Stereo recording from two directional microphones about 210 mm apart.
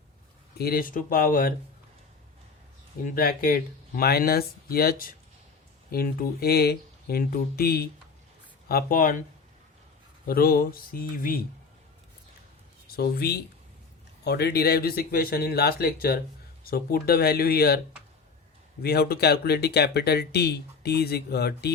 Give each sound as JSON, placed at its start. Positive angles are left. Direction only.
{"t": 0.6, "sound": "speech", "side_deg": 45}
{"t": 3.2, "sound": "speech", "side_deg": 45}
{"t": 10.2, "sound": "speech", "side_deg": 45}
{"t": 13.0, "sound": "speech", "side_deg": 50}
{"t": 18.8, "sound": "speech", "side_deg": 50}